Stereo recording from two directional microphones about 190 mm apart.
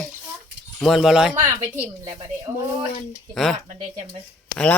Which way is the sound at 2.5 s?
15° right (ahead or behind).